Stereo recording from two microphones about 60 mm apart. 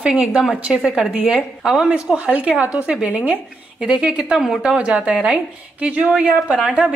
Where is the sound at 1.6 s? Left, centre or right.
Centre.